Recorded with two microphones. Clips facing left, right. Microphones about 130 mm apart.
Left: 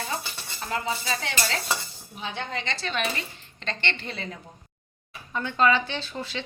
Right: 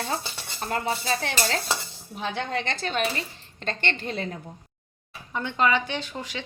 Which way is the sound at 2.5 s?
50° right (ahead or behind).